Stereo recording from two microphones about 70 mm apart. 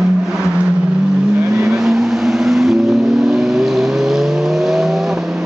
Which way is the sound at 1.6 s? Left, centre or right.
Centre.